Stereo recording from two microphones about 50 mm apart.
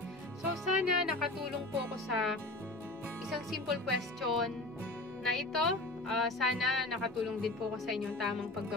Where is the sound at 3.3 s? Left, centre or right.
Centre.